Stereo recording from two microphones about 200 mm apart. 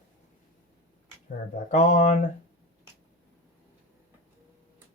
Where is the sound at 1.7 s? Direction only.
40° left (ahead or behind).